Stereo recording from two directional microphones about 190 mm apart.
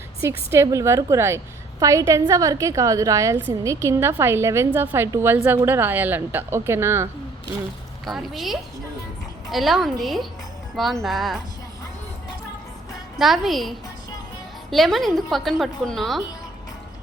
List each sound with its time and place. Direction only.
0.2 s a woman's voice: 15° right (ahead or behind)
8.0 s a woman's voice: centre (ahead or behind)
13.1 s a woman's voice: centre (ahead or behind)